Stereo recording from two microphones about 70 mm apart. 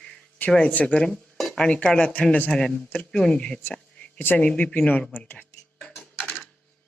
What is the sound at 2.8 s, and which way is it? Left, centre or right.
Speech, left.